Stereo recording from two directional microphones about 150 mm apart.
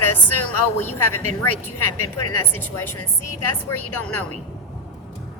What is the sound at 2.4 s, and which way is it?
Speech, 15° left (ahead or behind).